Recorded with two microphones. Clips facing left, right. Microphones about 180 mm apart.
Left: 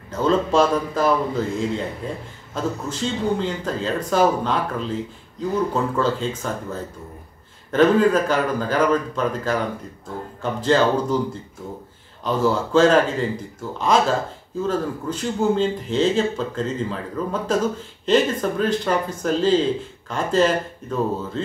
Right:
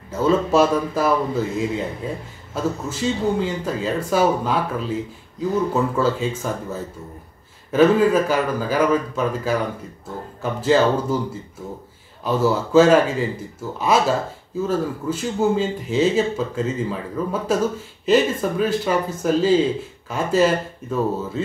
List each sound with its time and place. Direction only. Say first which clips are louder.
0.1 s speech: right 1 dB; 5° right (ahead or behind)
12.2 s speech: right 1 dB; 5° right (ahead or behind)